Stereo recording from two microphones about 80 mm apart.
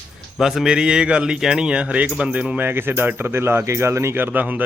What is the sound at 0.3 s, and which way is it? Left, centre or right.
Speech, centre.